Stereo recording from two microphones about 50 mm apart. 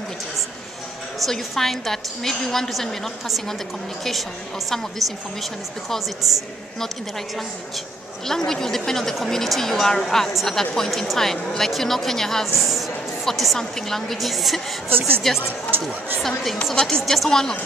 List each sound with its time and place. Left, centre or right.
1.2 s a woman's voice: centre
8.3 s a woman's voice: centre
15.0 s a woman's voice: right
15.7 s chatter: right
16.2 s a woman's voice: centre